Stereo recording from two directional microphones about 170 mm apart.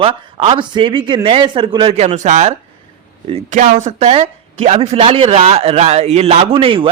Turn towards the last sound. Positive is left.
turn(degrees=-30)  # may be behind; listen again after turning